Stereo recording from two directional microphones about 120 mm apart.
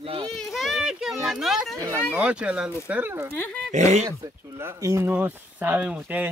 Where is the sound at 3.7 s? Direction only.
90° right.